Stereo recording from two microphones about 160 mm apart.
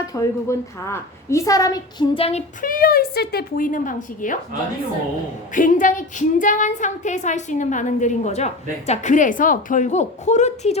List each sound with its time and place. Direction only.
0.1 s a woman's voice: 20° left (ahead or behind); by 2.4 s 35° left (ahead or behind)
2.6 s a woman's voice: 60° left (ahead or behind)
5.5 s a woman's voice: 55° left (ahead or behind)